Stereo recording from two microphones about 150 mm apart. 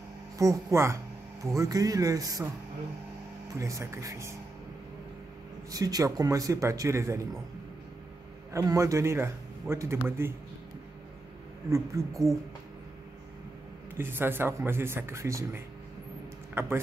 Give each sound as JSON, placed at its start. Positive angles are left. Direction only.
{"t": 0.4, "sound": "speech", "side_deg": -20}
{"t": 3.5, "sound": "a man's voice", "side_deg": -20}
{"t": 5.7, "sound": "a man's voice", "side_deg": -25}
{"t": 8.5, "sound": "a man's voice", "side_deg": -20}
{"t": 11.7, "sound": "a man's voice", "side_deg": -20}
{"t": 13.9, "sound": "a man's voice", "side_deg": -15}